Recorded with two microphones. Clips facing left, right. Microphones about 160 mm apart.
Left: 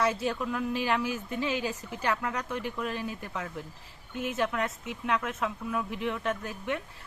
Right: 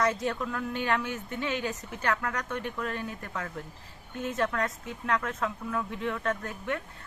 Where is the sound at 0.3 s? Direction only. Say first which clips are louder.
Left 1 dB; 15° left (ahead or behind).